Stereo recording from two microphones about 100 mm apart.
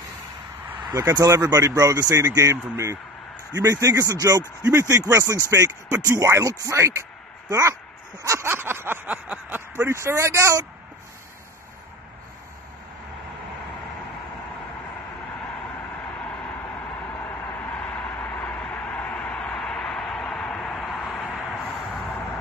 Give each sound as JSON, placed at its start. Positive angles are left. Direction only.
{"t": 1.1, "sound": "speech", "side_deg": -35}
{"t": 17.2, "sound": "vehicle", "side_deg": 25}
{"t": 19.3, "sound": "vehicle", "side_deg": 5}